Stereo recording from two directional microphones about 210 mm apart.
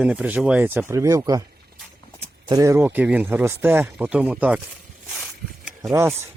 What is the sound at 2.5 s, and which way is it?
Speech, 15° right (ahead or behind).